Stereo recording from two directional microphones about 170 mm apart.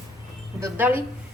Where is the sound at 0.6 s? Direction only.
10° right (ahead or behind).